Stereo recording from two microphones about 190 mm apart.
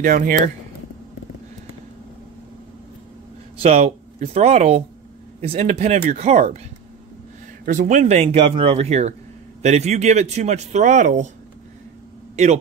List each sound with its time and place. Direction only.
0.0 s speech: 45° right (ahead or behind)
3.5 s speech: 30° right (ahead or behind)
7.6 s speech: 45° right (ahead or behind)